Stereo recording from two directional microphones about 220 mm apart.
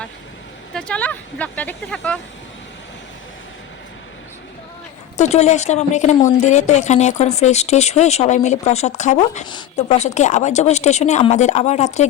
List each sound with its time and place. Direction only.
0.7 s speech: 5° left (ahead or behind)
5.1 s a woman's voice: 30° left (ahead or behind)